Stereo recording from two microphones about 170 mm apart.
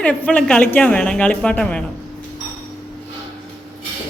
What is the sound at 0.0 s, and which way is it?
A woman's voice, 5° left (ahead or behind).